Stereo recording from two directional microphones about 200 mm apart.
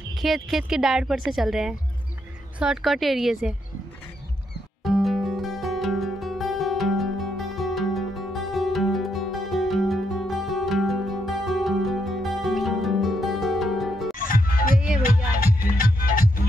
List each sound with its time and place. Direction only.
0.1 s speech: centre (ahead or behind)
4.8 s music: centre (ahead or behind)
14.2 s music: 45° left (ahead or behind)